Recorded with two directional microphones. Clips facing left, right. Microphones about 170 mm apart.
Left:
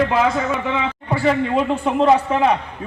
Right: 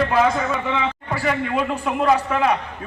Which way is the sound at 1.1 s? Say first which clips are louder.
Left 7 dB; 30° left (ahead or behind).